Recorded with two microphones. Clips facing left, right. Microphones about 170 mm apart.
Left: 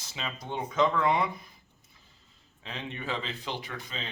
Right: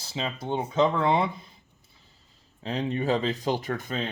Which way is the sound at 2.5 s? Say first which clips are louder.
Right 11 dB; 35° right (ahead or behind).